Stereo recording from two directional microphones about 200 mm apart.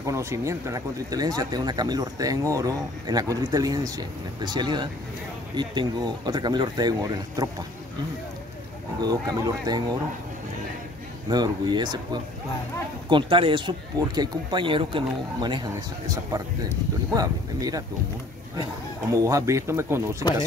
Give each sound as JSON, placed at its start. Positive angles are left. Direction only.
{"t": 0.0, "sound": "speech", "side_deg": -15}
{"t": 9.0, "sound": "speech", "side_deg": -20}
{"t": 11.2, "sound": "speech", "side_deg": -20}
{"t": 17.1, "sound": "speech", "side_deg": -20}
{"t": 19.1, "sound": "speech", "side_deg": -15}